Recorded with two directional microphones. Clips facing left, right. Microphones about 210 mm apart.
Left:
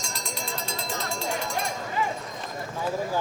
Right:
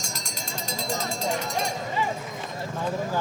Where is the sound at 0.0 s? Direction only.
45° right (ahead or behind).